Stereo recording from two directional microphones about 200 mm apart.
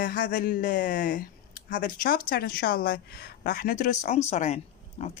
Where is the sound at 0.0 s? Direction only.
45° left (ahead or behind).